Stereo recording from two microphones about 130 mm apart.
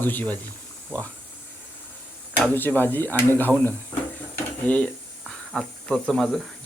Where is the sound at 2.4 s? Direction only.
15° left (ahead or behind).